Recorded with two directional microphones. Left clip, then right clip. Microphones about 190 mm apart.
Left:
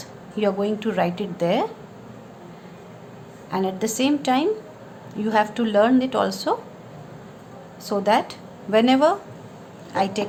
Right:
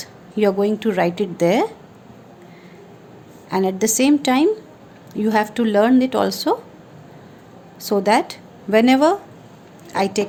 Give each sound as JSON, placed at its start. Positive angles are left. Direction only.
{"t": 0.0, "sound": "speech", "side_deg": -40}
{"t": 3.5, "sound": "a woman's voice", "side_deg": -45}
{"t": 7.9, "sound": "a woman's voice", "side_deg": -40}